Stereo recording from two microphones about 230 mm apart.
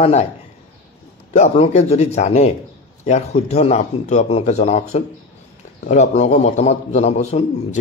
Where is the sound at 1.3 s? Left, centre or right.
Left.